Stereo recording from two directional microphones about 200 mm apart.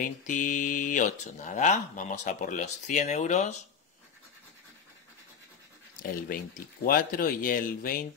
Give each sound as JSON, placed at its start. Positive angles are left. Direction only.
{"t": 0.0, "sound": "speech", "side_deg": 40}
{"t": 6.2, "sound": "speech", "side_deg": 45}